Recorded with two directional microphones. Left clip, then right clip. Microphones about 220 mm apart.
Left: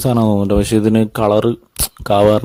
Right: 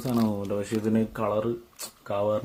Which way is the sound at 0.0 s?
45° left (ahead or behind).